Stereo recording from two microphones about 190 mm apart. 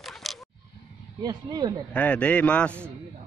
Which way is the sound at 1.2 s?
20° right (ahead or behind).